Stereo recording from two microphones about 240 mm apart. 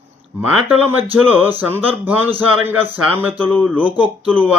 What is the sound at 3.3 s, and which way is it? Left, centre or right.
Speech, centre.